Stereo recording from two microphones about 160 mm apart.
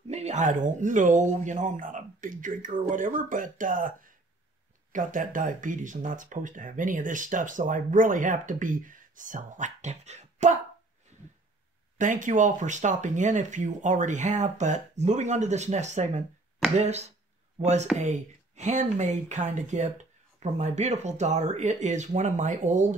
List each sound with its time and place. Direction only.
0.1 s speech: 45° right (ahead or behind)
12.0 s speech: 50° right (ahead or behind)